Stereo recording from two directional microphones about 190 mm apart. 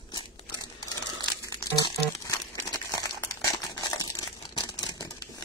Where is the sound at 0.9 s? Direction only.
20° right (ahead or behind).